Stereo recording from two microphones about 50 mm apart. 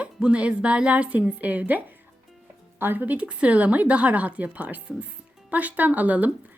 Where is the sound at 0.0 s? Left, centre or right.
Right.